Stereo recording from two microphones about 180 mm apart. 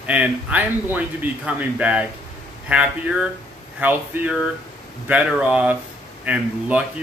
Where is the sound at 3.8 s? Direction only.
10° right (ahead or behind).